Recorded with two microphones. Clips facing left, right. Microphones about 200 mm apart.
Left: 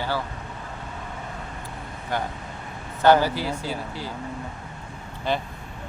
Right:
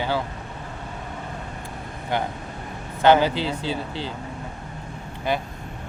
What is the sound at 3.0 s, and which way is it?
Speech, 20° right (ahead or behind).